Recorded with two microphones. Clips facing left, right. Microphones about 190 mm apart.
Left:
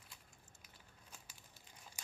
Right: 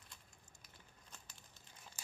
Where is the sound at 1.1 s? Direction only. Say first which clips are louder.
Even; 10° left (ahead or behind).